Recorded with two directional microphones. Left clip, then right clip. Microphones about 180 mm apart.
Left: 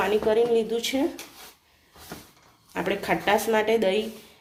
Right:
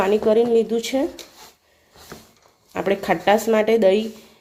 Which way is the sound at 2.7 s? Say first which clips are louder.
Right 5 dB; 55° right (ahead or behind).